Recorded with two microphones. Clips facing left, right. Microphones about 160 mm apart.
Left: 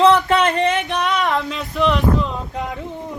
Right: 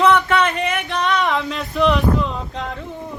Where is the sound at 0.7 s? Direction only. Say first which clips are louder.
Left 4 dB; 25° left (ahead or behind).